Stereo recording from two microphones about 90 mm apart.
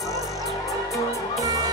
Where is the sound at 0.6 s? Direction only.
40° left (ahead or behind).